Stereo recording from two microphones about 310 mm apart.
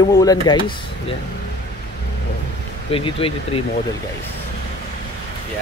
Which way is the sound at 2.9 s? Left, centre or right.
Centre.